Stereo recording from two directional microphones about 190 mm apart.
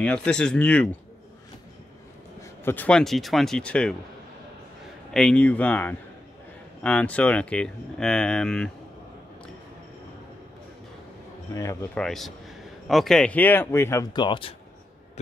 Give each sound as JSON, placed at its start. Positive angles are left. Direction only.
{"t": 0.0, "sound": "speech", "side_deg": 5}
{"t": 2.4, "sound": "speech", "side_deg": 10}
{"t": 5.1, "sound": "a man's voice", "side_deg": 5}
{"t": 11.5, "sound": "a man's voice", "side_deg": 15}
{"t": 11.9, "sound": "a man's voice", "side_deg": 5}